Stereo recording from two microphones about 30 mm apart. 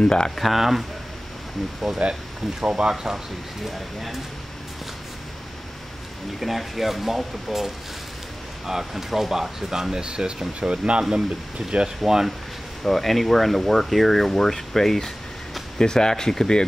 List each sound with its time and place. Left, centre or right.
0.0 s speech: left
0.4 s speech: centre
2.0 s speech: right
2.6 s speech: right
3.6 s speech: centre
6.4 s speech: centre
10.0 s speech: right
12.0 s speech: centre
12.8 s speech: centre